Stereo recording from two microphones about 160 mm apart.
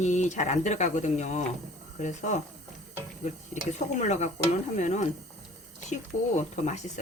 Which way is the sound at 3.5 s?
50° left (ahead or behind).